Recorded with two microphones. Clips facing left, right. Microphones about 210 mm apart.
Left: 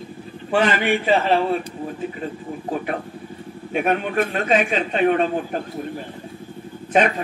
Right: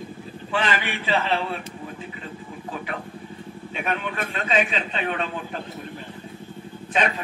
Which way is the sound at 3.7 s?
40° left (ahead or behind).